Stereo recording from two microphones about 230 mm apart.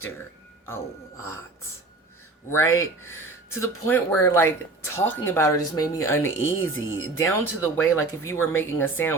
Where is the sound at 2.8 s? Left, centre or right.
Centre.